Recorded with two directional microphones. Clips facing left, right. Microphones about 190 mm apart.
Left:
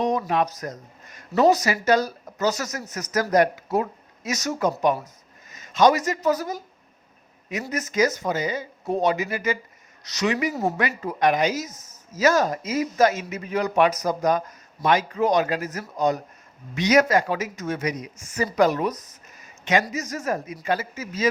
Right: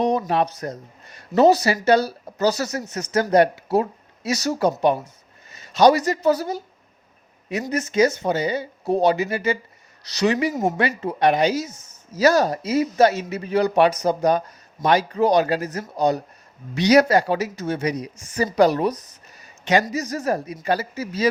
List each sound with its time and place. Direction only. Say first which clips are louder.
0.0 s speech: right 2 dB; 35° right (ahead or behind)
7.7 s speech: right 4 dB; 30° right (ahead or behind)
10.5 s speech: right 3 dB; 15° right (ahead or behind)
10.8 s speech: right 3 dB; 30° right (ahead or behind)